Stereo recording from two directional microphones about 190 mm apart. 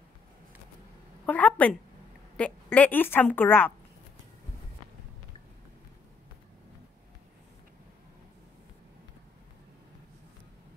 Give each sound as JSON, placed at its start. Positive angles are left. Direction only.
{"t": 1.2, "sound": "a woman's voice", "side_deg": 5}